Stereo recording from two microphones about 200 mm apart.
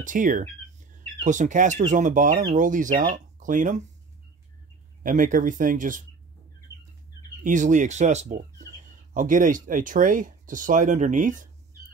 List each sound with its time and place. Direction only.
0.0 s speech: 40° right (ahead or behind)
5.0 s speech: 40° right (ahead or behind)
7.4 s speech: 40° right (ahead or behind)